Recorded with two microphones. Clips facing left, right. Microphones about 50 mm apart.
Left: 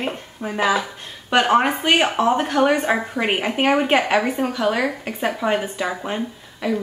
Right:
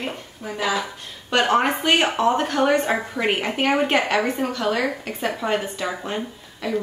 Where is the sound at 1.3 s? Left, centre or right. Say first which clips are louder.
Left 2 dB; centre.